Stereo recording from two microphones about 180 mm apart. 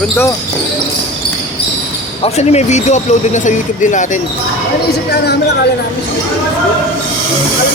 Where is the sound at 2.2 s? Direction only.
35° left (ahead or behind).